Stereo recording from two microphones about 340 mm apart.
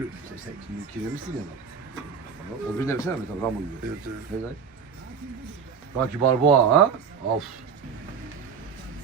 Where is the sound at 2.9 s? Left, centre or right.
Centre.